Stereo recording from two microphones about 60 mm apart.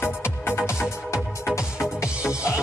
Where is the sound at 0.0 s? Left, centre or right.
Left.